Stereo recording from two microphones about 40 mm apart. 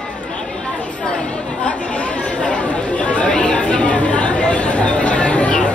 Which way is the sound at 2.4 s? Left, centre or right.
Left.